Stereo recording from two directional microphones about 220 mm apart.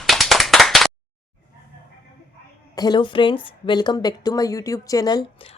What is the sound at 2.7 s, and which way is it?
A woman's voice, 15° left (ahead or behind).